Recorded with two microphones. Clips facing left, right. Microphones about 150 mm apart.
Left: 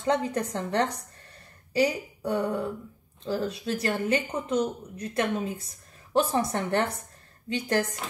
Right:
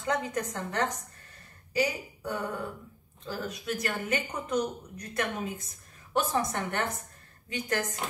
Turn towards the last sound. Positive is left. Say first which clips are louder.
# left 5 dB
turn(degrees=35)  # may be behind; listen again after turning